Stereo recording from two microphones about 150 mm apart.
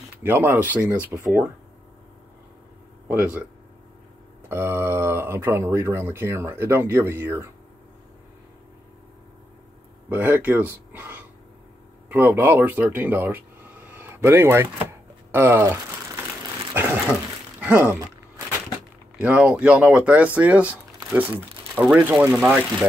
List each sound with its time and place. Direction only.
0.2 s speech: 15° right (ahead or behind)
3.1 s speech: 10° right (ahead or behind)
4.5 s speech: 15° right (ahead or behind)
10.0 s speech: 10° right (ahead or behind)
16.7 s dog: 10° right (ahead or behind)
19.1 s speech: 10° right (ahead or behind)